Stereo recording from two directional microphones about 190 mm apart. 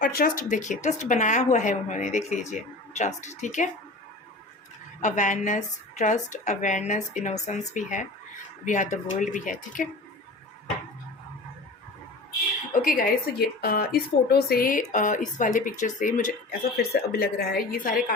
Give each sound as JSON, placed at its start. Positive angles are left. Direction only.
{"t": 0.0, "sound": "a woman's voice", "side_deg": 50}
{"t": 4.9, "sound": "a woman's voice", "side_deg": 40}
{"t": 12.7, "sound": "speech", "side_deg": 45}